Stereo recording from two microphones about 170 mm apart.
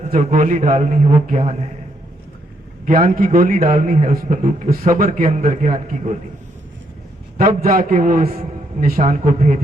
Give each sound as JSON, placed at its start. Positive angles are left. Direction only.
{"t": 0.1, "sound": "a man's voice", "side_deg": -50}
{"t": 2.8, "sound": "a man's voice", "side_deg": -55}
{"t": 7.3, "sound": "a man's voice", "side_deg": -55}